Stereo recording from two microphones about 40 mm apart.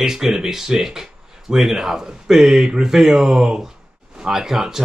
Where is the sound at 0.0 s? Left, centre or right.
Centre.